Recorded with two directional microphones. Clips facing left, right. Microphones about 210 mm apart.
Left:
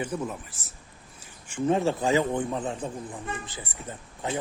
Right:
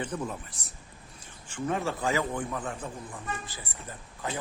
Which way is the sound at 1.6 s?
25° left (ahead or behind).